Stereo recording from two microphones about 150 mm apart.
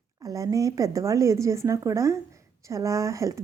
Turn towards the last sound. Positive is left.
turn(degrees=-20)  # may be behind; listen again after turning